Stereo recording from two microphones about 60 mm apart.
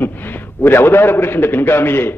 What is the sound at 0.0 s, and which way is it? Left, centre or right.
A man's voice, left.